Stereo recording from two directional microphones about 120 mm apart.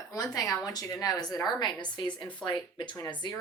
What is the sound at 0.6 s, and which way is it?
A woman's voice, 30° left (ahead or behind).